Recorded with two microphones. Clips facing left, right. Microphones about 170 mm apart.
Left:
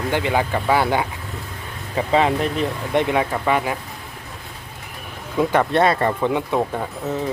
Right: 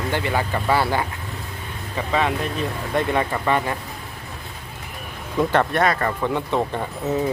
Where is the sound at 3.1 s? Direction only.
5° left (ahead or behind).